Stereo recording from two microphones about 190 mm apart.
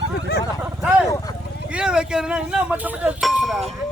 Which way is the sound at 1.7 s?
5° right (ahead or behind).